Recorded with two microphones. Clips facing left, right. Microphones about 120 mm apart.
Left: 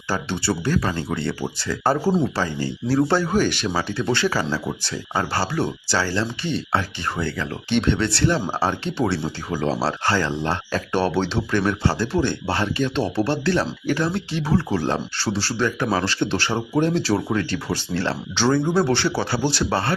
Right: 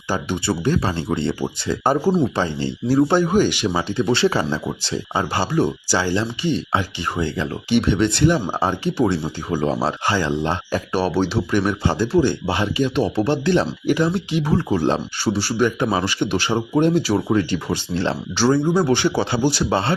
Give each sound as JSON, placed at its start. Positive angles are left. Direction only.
{"t": 0.1, "sound": "speech", "side_deg": -15}
{"t": 2.0, "sound": "speech", "side_deg": 0}
{"t": 2.3, "sound": "speech", "side_deg": -20}